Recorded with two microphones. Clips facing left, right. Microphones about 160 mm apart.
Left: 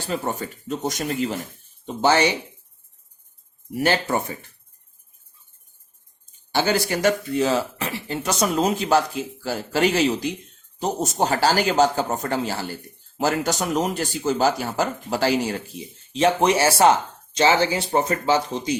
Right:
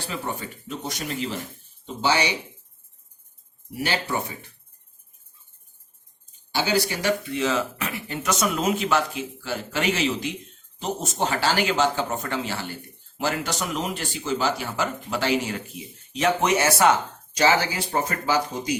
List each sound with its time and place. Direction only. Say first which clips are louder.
0.1 s speech: left 7 dB; 45° left (ahead or behind)
3.8 s speech: left 6 dB; 45° left (ahead or behind)
6.5 s speech: left 3 dB; 45° left (ahead or behind); by 18.8 s 25° left (ahead or behind)